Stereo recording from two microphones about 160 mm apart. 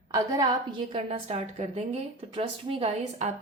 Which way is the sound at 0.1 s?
20° right (ahead or behind).